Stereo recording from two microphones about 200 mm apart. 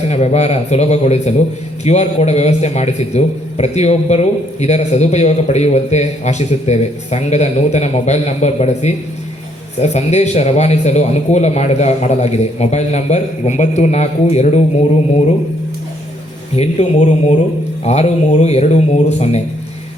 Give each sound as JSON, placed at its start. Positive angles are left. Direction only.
{"t": 0.1, "sound": "a man's voice", "side_deg": 35}
{"t": 16.6, "sound": "a man's voice", "side_deg": 35}